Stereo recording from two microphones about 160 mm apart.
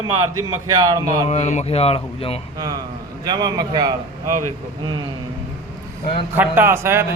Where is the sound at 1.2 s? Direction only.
45° left (ahead or behind).